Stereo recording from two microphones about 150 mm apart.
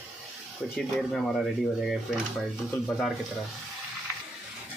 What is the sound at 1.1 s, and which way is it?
Speech, centre (ahead or behind).